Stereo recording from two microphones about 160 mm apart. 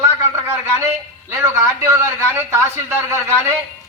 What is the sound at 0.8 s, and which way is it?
A man's voice, 15° right (ahead or behind).